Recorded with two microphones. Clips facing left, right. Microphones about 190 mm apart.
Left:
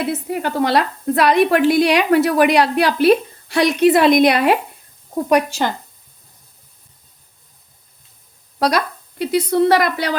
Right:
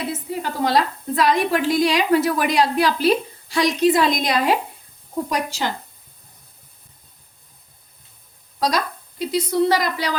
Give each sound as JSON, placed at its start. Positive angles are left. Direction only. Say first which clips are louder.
{"t": 0.1, "sound": "a woman's voice", "louder": "left 5 dB", "side_deg": 65}
{"t": 8.5, "sound": "a woman's voice", "louder": "left 4 dB", "side_deg": 65}